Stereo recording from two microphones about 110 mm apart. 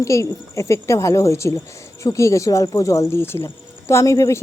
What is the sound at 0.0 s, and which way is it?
Speech, 30° left (ahead or behind).